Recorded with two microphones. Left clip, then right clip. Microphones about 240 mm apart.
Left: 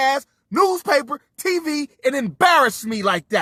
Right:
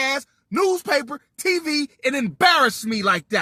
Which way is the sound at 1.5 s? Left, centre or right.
Centre.